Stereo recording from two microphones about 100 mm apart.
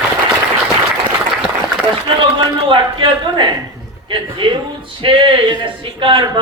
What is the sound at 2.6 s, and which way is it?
Speech, 55° right (ahead or behind).